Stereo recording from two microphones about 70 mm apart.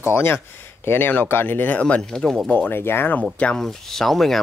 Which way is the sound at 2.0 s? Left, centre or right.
Centre.